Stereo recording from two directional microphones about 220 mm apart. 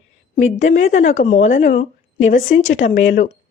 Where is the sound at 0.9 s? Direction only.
35° left (ahead or behind).